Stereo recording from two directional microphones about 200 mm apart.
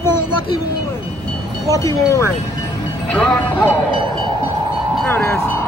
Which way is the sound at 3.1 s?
5° left (ahead or behind).